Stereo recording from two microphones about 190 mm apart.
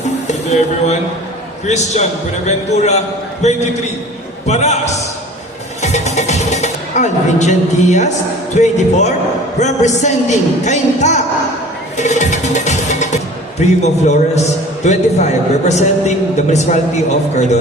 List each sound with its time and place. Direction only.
0.3 s a man's voice: 35° left (ahead or behind)
5.8 s music: 35° left (ahead or behind)
8.5 s a man's voice: 40° left (ahead or behind)
11.9 s music: 40° left (ahead or behind)
14.8 s a man's voice: 35° left (ahead or behind)